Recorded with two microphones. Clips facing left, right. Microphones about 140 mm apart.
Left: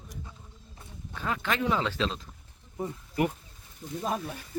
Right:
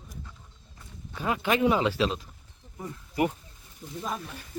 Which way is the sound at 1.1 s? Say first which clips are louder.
Right 4 dB; 15° right (ahead or behind).